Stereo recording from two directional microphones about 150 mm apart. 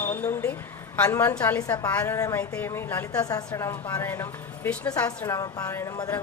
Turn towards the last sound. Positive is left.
turn(degrees=20)  # may be behind; listen again after turning